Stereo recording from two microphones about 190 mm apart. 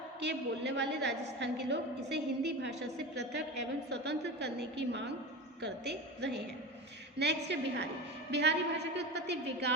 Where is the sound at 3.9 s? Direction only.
60° right (ahead or behind).